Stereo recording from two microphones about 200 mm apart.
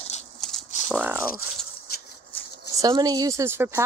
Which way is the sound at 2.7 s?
20° right (ahead or behind).